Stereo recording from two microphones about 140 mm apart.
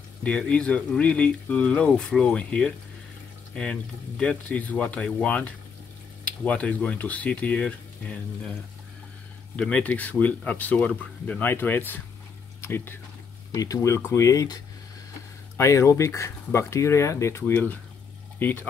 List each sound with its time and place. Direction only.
0.2 s speech: 5° left (ahead or behind)
9.6 s speech: 10° left (ahead or behind)